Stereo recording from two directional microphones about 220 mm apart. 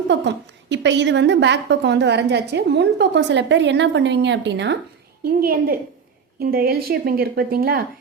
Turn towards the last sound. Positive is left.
turn(degrees=-45)  # may be behind; listen again after turning